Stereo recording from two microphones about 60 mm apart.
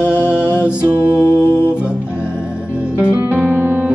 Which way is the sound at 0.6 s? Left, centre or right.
Centre.